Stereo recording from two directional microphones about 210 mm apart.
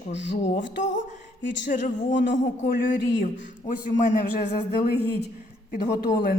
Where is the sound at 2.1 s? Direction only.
55° left (ahead or behind).